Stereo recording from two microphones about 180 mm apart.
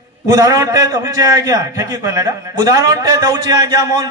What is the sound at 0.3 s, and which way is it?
A man's voice, 20° right (ahead or behind).